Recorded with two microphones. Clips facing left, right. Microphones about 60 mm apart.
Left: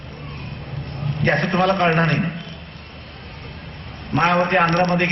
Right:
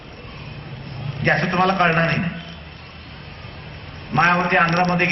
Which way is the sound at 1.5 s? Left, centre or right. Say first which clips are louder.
Left 1 dB; right.